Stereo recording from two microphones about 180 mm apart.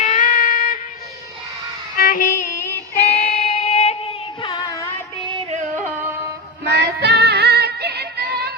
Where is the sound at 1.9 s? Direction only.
55° left (ahead or behind).